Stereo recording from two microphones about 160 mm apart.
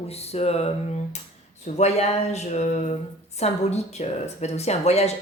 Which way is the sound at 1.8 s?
45° left (ahead or behind).